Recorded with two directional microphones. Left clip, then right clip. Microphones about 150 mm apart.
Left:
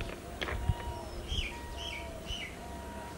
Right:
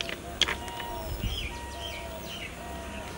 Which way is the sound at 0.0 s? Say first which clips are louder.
Right 10 dB; 40° right (ahead or behind).